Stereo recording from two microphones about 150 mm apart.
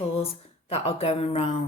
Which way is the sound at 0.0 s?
40° left (ahead or behind).